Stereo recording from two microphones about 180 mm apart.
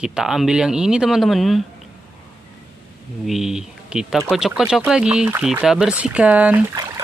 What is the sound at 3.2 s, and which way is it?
Speech, centre (ahead or behind).